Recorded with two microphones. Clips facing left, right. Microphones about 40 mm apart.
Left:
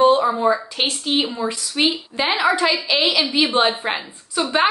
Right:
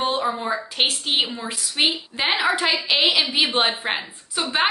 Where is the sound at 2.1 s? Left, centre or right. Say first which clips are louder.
Left 3 dB; centre.